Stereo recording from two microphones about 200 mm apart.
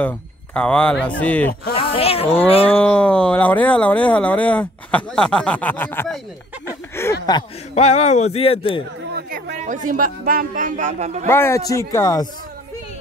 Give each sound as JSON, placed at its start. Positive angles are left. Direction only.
{"t": 0.6, "sound": "speech", "side_deg": 5}
{"t": 1.8, "sound": "speech", "side_deg": 30}
{"t": 2.7, "sound": "speech", "side_deg": 5}
{"t": 7.0, "sound": "a sound", "side_deg": 15}
{"t": 7.7, "sound": "speech", "side_deg": 35}
{"t": 9.1, "sound": "a sound", "side_deg": -40}
{"t": 9.8, "sound": "speech", "side_deg": -45}
{"t": 11.2, "sound": "speech", "side_deg": 10}